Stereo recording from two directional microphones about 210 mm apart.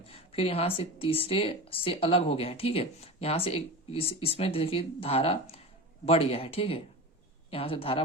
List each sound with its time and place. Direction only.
0.0 s a woman's voice: 25° left (ahead or behind)